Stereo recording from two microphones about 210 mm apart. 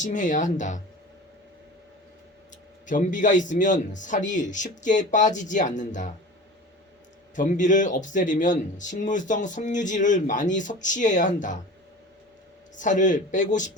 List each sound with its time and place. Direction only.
0.0 s speech: 35° left (ahead or behind)
2.8 s speech: 40° left (ahead or behind)
7.3 s speech: 40° left (ahead or behind)
12.7 s speech: 35° left (ahead or behind)